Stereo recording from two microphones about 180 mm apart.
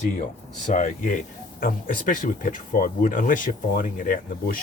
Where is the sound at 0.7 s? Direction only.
45° left (ahead or behind).